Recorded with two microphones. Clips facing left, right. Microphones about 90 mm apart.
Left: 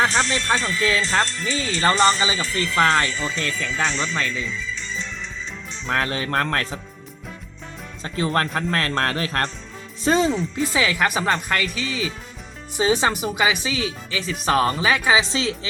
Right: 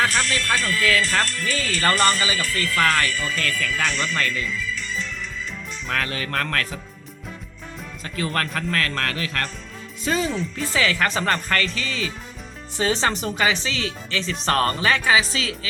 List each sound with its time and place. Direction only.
0.0 s speech: 25° left (ahead or behind)
8.0 s speech: 25° left (ahead or behind)
10.3 s speech: 15° left (ahead or behind)